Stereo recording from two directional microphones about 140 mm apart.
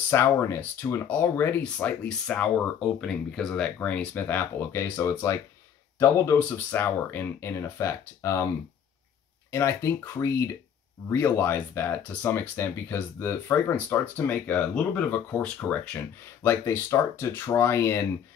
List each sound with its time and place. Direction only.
0.1 s speech: 20° left (ahead or behind)
9.5 s speech: 20° left (ahead or behind)